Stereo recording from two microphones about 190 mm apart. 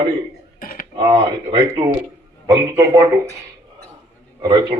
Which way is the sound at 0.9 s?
25° right (ahead or behind).